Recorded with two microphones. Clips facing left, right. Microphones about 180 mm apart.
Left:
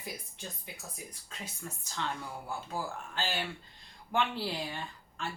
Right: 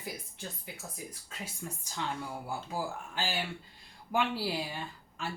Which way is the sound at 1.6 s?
10° right (ahead or behind).